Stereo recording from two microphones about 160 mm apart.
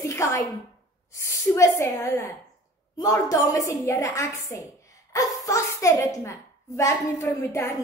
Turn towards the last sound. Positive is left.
turn(degrees=20)  # may be behind; listen again after turning